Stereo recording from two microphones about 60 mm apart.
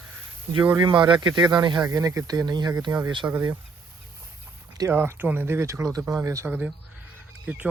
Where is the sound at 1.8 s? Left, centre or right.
Right.